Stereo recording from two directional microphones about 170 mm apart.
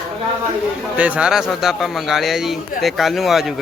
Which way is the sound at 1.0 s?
5° right (ahead or behind).